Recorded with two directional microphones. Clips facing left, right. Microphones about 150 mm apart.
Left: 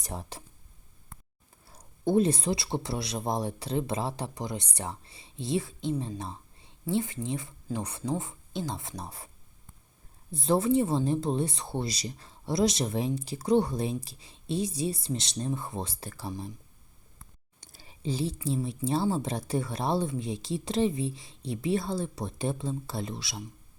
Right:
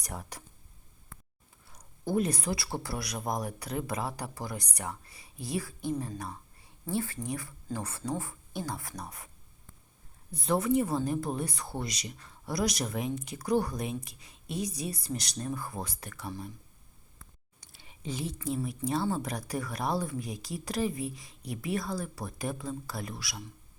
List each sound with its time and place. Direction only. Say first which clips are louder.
0.0 s speech: left 3 dB; 25° left (ahead or behind)
1.6 s speech: left 7 dB; 30° left (ahead or behind)
6.0 s whispering: left 2 dB; 25° left (ahead or behind)
6.9 s speech: left 3 dB; 20° left (ahead or behind)
10.3 s speech: left 3 dB; 30° left (ahead or behind)
17.2 s whispering: left 1 dB; 35° left (ahead or behind)
18.4 s speech: left 2 dB; 25° left (ahead or behind)